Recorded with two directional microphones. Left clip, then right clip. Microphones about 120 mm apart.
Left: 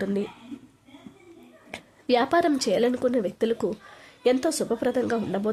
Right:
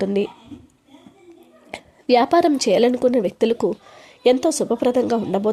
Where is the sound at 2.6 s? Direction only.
40° right (ahead or behind).